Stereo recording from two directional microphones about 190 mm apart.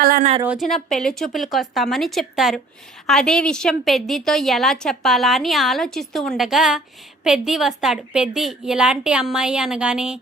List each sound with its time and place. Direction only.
0.0 s a woman's voice: 50° right (ahead or behind)
0.4 s a woman's voice: centre (ahead or behind)